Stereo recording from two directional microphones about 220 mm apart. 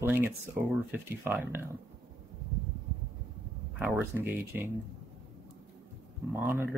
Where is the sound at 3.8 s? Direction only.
10° right (ahead or behind).